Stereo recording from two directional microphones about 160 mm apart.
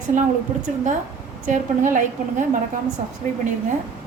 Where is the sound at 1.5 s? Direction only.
55° right (ahead or behind).